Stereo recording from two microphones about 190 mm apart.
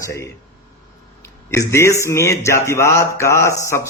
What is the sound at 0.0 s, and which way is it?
Speech, 15° left (ahead or behind).